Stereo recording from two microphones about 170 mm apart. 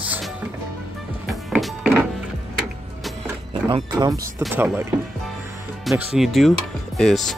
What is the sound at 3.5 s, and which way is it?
Speech, 25° right (ahead or behind).